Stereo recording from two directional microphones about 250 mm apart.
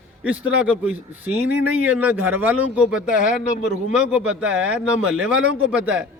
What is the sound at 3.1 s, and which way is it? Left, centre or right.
Speech, left.